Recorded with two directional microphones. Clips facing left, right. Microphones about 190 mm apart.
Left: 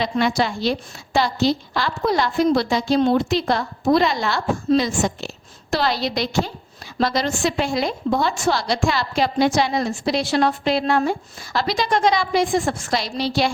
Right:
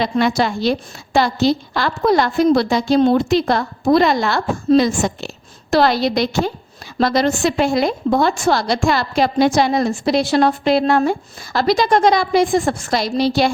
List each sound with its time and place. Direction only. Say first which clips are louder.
0.0 s a woman's voice: right 3 dB; 50° right (ahead or behind)